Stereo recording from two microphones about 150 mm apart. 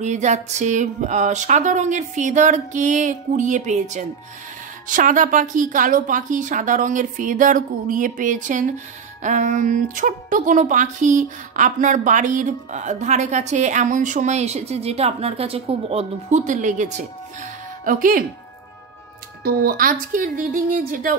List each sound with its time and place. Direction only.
0.0 s music: 50° right (ahead or behind)
4.8 s a woman's voice: 60° right (ahead or behind)
19.4 s a woman's voice: 85° right; by 21.2 s 65° right (ahead or behind)